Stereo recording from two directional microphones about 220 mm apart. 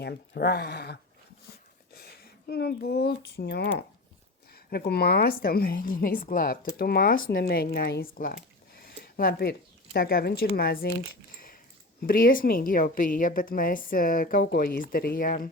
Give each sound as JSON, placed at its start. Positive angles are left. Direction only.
{"t": 0.0, "sound": "a woman's voice", "side_deg": 45}
{"t": 12.0, "sound": "a woman's voice", "side_deg": 40}